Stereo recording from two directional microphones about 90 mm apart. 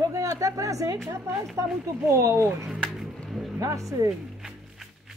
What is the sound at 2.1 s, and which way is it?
Speech, 40° right (ahead or behind).